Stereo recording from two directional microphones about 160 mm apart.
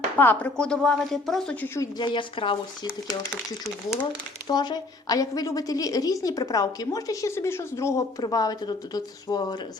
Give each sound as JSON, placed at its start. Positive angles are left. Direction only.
{"t": 0.2, "sound": "speech", "side_deg": 10}
{"t": 1.6, "sound": "speech", "side_deg": 15}
{"t": 2.0, "sound": "a woman's voice", "side_deg": 30}
{"t": 4.4, "sound": "a woman's voice", "side_deg": 25}